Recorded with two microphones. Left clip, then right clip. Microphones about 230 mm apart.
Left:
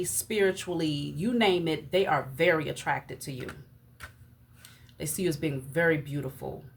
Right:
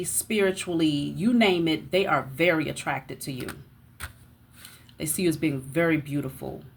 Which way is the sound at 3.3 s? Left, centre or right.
Right.